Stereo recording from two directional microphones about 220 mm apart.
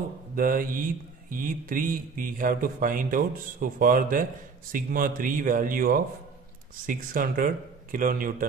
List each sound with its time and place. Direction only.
0.4 s speech: 40° right (ahead or behind)